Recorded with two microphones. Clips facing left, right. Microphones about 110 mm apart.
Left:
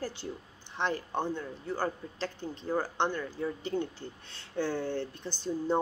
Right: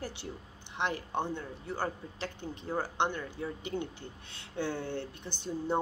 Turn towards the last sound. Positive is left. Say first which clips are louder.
# left 3 dB
turn(degrees=-15)  # may be behind; listen again after turning